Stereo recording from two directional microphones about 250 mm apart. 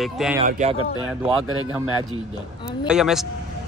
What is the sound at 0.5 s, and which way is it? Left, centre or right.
Speech, right.